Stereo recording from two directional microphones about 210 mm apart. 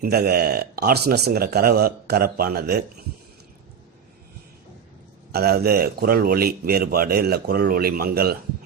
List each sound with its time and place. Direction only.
0.0 s a man's voice: 50° right (ahead or behind)
5.3 s a man's voice: 50° right (ahead or behind)